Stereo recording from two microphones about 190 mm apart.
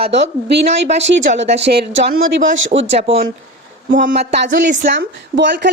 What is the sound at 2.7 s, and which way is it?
Speech, 45° right (ahead or behind).